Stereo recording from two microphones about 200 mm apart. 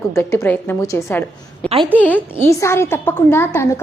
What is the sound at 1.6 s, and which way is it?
Speech, 25° right (ahead or behind).